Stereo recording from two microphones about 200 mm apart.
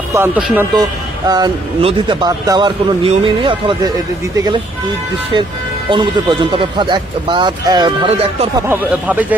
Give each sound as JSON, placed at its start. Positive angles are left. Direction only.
{"t": 0.1, "sound": "speech", "side_deg": -10}
{"t": 1.3, "sound": "a man's voice", "side_deg": -20}
{"t": 5.9, "sound": "a man's voice", "side_deg": -25}
{"t": 8.7, "sound": "speech", "side_deg": -10}